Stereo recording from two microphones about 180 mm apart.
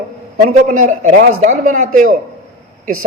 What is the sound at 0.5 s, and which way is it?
A man's voice, 45° right (ahead or behind).